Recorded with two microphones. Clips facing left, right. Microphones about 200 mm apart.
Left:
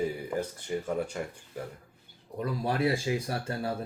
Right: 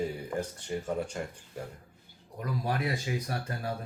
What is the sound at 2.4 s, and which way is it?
Speech, 30° left (ahead or behind).